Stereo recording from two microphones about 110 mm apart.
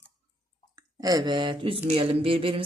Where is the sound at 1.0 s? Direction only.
35° right (ahead or behind); by 2.6 s 55° right (ahead or behind).